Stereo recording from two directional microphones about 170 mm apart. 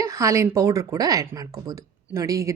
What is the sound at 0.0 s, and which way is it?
A woman's voice, 20° right (ahead or behind).